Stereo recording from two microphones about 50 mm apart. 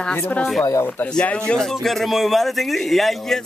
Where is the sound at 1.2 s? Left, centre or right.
Left.